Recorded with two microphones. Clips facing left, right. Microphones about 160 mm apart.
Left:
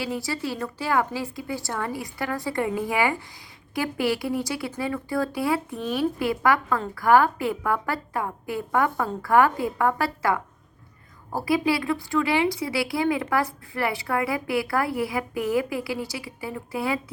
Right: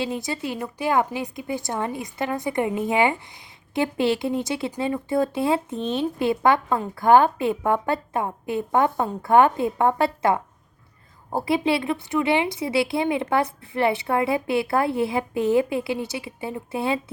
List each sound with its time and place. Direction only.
0.0 s speech: 20° right (ahead or behind)